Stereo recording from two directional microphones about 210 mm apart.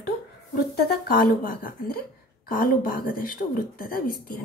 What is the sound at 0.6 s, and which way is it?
A woman's voice, 45° left (ahead or behind).